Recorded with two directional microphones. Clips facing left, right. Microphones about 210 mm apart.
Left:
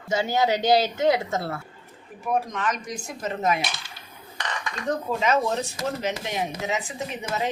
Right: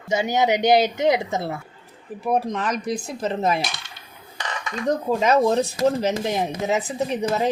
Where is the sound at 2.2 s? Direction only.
35° right (ahead or behind).